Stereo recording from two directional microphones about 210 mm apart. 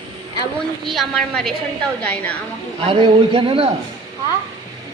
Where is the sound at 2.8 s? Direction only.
25° right (ahead or behind).